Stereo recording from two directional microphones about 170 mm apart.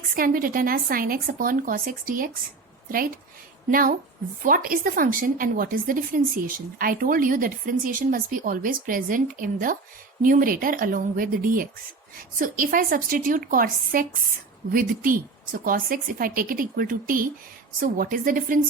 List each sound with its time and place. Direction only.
0.2 s a woman's voice: 55° right (ahead or behind)
3.7 s a woman's voice: 55° right (ahead or behind)